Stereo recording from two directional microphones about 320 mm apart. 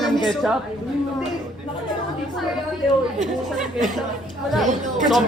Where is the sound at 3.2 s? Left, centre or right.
Centre.